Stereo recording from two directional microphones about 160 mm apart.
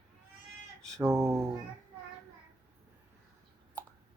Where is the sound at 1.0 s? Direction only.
20° right (ahead or behind).